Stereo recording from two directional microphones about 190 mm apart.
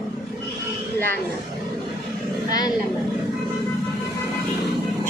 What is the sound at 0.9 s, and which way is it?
Speech, 10° left (ahead or behind).